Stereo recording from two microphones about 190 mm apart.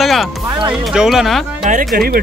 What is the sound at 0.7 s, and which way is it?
Speech, centre (ahead or behind).